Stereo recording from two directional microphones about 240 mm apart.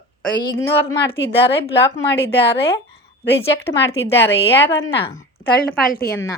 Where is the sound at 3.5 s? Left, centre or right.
Centre.